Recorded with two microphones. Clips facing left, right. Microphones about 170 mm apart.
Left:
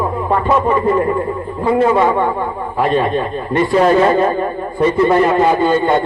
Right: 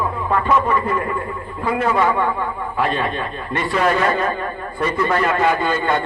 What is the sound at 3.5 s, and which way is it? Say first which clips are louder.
A man's voice: left 7 dB; 35° left (ahead or behind).